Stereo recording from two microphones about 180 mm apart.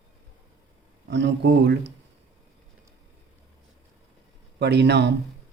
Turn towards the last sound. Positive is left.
turn(degrees=-70)  # may be behind; listen again after turning